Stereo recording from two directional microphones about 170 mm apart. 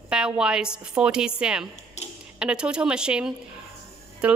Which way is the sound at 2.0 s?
40° left (ahead or behind).